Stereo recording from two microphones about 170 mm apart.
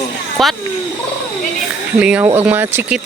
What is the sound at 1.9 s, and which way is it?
Speech, 5° right (ahead or behind).